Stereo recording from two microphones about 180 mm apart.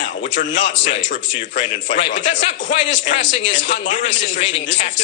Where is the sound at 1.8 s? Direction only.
90° left.